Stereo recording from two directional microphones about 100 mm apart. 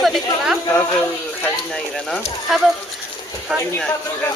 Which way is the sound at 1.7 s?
10° left (ahead or behind).